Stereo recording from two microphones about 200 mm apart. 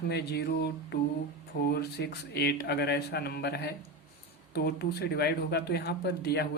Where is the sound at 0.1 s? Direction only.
55° left (ahead or behind).